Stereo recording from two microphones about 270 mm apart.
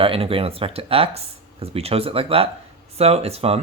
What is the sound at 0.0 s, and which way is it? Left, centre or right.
Speech, right.